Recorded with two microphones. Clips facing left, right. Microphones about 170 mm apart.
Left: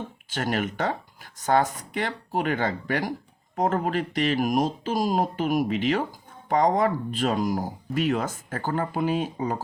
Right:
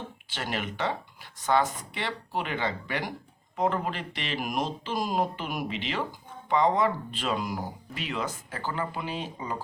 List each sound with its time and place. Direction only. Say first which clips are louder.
0.3 s speech: left 6 dB; 45° left (ahead or behind)